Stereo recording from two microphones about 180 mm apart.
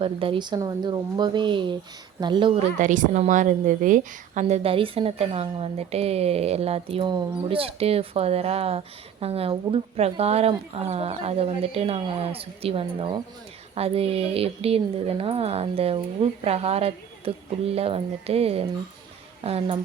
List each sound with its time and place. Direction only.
0.0 s speech: 30° right (ahead or behind)
2.7 s a woman's voice: 45° right (ahead or behind)
7.0 s speech: 20° right (ahead or behind)
7.4 s a woman's voice: 30° right (ahead or behind)